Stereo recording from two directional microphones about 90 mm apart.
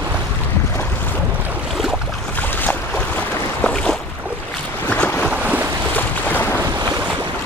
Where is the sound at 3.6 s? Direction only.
10° left (ahead or behind).